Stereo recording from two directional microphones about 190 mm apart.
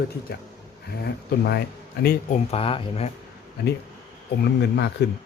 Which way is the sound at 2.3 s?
30° left (ahead or behind).